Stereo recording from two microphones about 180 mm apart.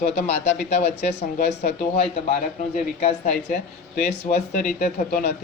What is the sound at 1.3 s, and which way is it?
Speech, 50° left (ahead or behind).